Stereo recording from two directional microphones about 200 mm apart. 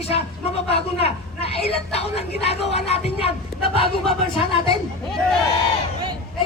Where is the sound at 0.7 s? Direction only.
30° left (ahead or behind).